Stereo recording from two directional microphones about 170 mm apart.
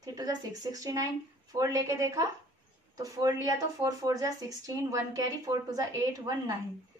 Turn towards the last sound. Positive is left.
turn(degrees=-20)  # may be behind; listen again after turning